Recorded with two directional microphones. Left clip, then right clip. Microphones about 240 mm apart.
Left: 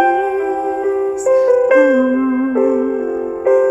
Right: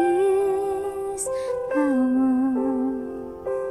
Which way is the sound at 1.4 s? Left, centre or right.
Left.